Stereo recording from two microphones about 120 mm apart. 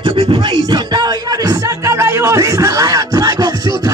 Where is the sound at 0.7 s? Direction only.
35° right (ahead or behind).